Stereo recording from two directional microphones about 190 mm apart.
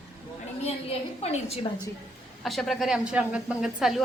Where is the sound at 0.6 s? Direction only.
35° left (ahead or behind).